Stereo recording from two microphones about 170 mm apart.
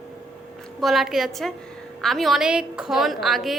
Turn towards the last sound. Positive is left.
turn(degrees=0)  # may be behind; listen again after turning